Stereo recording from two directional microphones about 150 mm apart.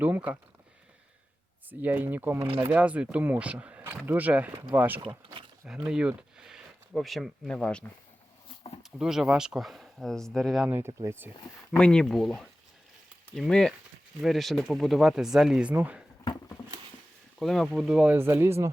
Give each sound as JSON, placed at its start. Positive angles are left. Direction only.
{"t": 0.0, "sound": "speech", "side_deg": -10}
{"t": 1.8, "sound": "speech", "side_deg": -10}
{"t": 4.9, "sound": "a sound", "side_deg": -35}
{"t": 5.6, "sound": "speech", "side_deg": -5}
{"t": 10.7, "sound": "speech", "side_deg": -15}
{"t": 11.8, "sound": "speech", "side_deg": 5}
{"t": 17.4, "sound": "speech", "side_deg": 0}